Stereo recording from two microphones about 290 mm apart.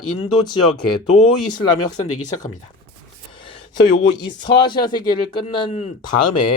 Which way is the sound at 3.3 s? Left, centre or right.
Centre.